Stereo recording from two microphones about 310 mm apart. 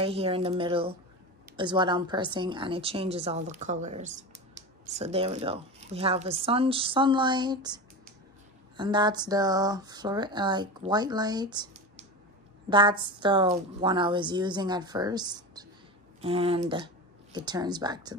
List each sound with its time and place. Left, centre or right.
0.0 s speech: centre